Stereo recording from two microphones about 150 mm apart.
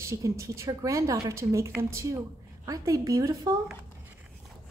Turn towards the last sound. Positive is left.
turn(degrees=-20)  # may be behind; listen again after turning